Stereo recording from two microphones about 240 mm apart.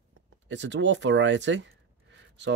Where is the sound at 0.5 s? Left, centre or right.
Right.